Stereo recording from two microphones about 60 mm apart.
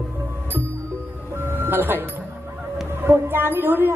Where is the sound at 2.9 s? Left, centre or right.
Right.